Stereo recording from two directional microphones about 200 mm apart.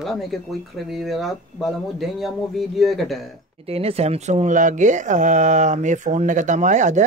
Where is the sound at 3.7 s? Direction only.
30° right (ahead or behind).